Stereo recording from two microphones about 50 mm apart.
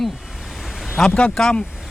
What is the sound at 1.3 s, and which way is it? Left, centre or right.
Speech, centre.